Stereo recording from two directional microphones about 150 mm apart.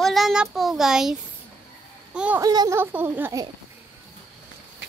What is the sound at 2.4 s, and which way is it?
Speech, 25° right (ahead or behind).